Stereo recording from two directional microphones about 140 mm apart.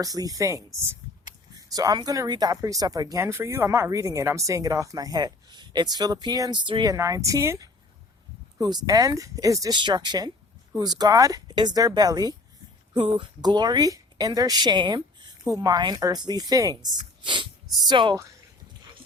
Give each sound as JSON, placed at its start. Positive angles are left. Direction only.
{"t": 0.0, "sound": "speech", "side_deg": -25}
{"t": 6.9, "sound": "speech", "side_deg": -20}
{"t": 17.2, "sound": "a sound", "side_deg": -35}
{"t": 17.8, "sound": "speech", "side_deg": -35}